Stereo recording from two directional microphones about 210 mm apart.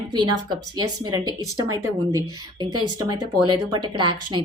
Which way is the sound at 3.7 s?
20° right (ahead or behind).